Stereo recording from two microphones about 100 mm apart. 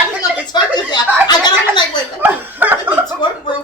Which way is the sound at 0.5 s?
45° left (ahead or behind).